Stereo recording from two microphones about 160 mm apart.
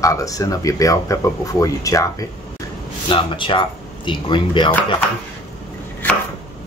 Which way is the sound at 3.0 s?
30° left (ahead or behind).